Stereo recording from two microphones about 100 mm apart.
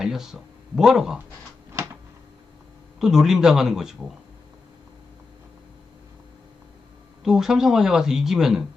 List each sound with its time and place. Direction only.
0.0 s speech: 5° right (ahead or behind)
1.7 s a sound: 30° right (ahead or behind)
3.0 s speech: 5° right (ahead or behind)
7.3 s speech: 5° right (ahead or behind)